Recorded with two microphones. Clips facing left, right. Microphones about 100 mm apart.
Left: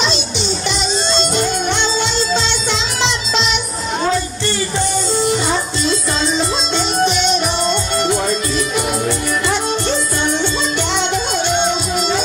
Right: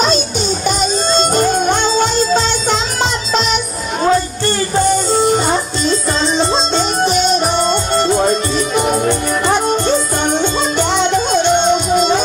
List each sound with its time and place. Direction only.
0.0 s music: 45° right (ahead or behind)